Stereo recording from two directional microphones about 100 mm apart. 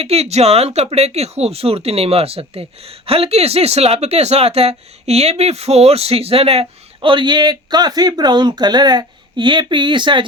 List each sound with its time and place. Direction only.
0.0 s speech: 90° right; by 10.2 s 50° right (ahead or behind)